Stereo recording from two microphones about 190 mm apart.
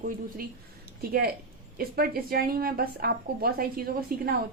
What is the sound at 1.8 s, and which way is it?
A woman's voice, 55° right (ahead or behind).